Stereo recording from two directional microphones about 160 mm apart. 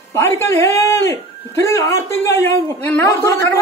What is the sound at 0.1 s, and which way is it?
A man's voice, 15° left (ahead or behind).